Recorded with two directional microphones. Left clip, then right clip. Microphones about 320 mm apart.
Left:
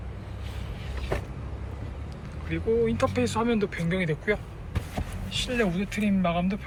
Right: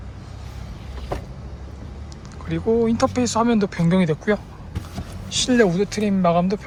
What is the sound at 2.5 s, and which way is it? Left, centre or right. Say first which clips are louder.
Speech: right 5 dB; centre.